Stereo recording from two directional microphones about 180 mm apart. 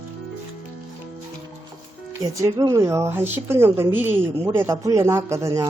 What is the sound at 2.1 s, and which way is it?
A man's voice, 15° right (ahead or behind).